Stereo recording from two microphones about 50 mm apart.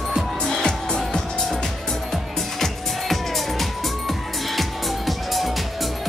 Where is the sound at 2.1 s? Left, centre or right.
Centre.